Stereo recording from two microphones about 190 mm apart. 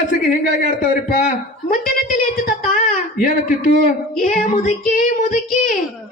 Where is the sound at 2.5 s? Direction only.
45° left (ahead or behind).